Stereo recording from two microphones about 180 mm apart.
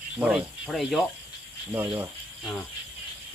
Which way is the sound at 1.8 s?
20° right (ahead or behind).